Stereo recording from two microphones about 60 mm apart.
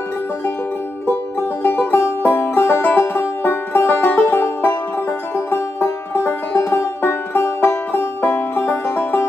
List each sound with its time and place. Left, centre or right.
1.6 s music: left